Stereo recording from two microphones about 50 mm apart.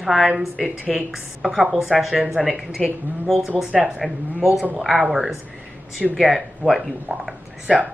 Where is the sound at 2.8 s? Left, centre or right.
Centre.